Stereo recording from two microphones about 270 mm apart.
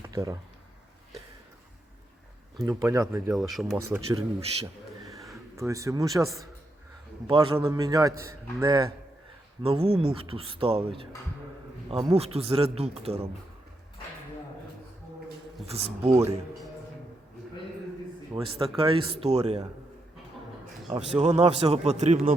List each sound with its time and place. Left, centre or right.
0.1 s speech: centre
2.6 s speech: centre
3.8 s speech: centre
5.5 s speech: centre
15.6 s speech: right
18.3 s speech: right
20.9 s speech: right